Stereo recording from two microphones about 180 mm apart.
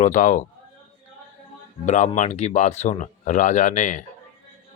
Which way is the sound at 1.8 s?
45° left (ahead or behind).